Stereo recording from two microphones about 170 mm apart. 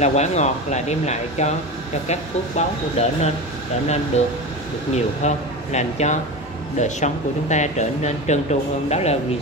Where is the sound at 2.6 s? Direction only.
40° left (ahead or behind).